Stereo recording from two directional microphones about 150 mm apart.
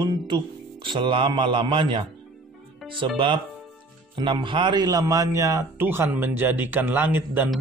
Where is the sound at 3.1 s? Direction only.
35° right (ahead or behind).